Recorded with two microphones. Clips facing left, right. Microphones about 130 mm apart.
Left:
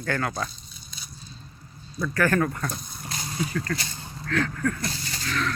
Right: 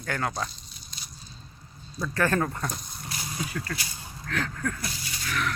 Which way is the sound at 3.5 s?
10° right (ahead or behind).